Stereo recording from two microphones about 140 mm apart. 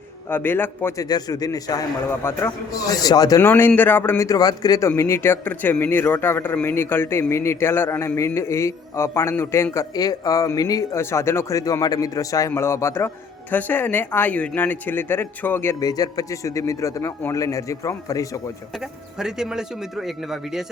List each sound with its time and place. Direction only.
0.3 s a man's voice: 15° left (ahead or behind)
1.0 s a man's voice: 25° left (ahead or behind)
18.8 s speech: 5° right (ahead or behind)